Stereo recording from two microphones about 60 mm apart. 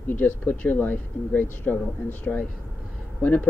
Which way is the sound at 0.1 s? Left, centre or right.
Left.